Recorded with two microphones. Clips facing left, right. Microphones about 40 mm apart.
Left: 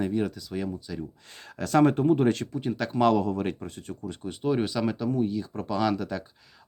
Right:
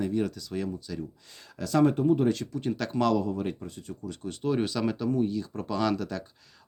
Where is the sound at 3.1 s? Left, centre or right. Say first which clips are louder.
Left 2 dB; left.